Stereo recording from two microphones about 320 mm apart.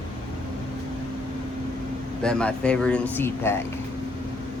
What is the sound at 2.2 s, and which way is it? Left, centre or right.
Speech, centre.